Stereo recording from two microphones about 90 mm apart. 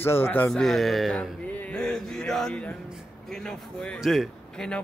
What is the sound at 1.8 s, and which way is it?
A man's voice, 5° left (ahead or behind).